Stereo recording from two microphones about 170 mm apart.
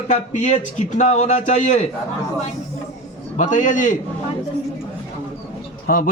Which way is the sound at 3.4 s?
45° left (ahead or behind).